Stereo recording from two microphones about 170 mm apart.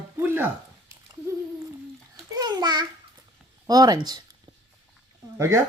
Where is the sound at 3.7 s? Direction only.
20° right (ahead or behind).